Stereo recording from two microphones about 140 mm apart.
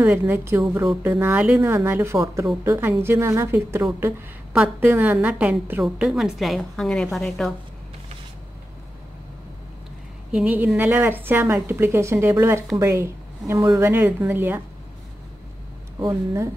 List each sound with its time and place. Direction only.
0.0 s a woman's voice: 15° right (ahead or behind); by 7.5 s centre (ahead or behind)
10.3 s a woman's voice: 10° right (ahead or behind)
16.0 s a woman's voice: 30° right (ahead or behind)